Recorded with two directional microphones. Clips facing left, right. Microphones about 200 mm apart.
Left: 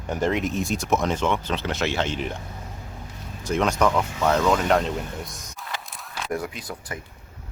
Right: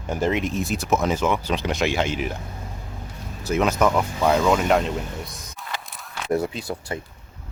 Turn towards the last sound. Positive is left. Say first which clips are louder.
# right 5 dB
turn(degrees=-25)  # may be behind; listen again after turning